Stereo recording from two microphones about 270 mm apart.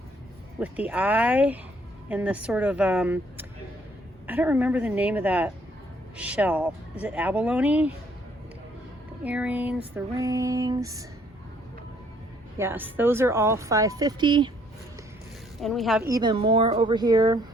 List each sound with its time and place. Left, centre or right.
0.6 s speech: centre
9.2 s speech: centre
12.5 s speech: centre
15.6 s speech: centre
16.0 s speech: centre